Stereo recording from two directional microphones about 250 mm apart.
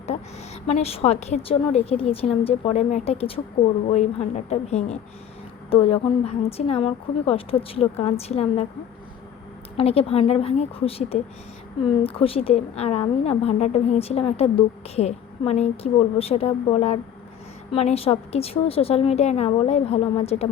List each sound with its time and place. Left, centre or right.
0.7 s a woman's voice: left
9.7 s a woman's voice: left